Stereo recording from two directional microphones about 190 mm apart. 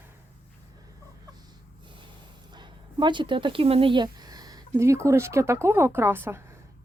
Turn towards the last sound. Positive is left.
turn(degrees=-15)  # may be behind; listen again after turning